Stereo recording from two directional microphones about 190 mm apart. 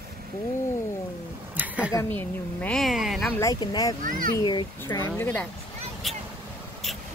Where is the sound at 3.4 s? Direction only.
20° left (ahead or behind).